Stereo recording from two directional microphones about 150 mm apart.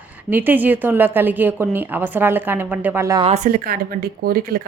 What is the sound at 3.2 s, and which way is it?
Speech, 45° right (ahead or behind).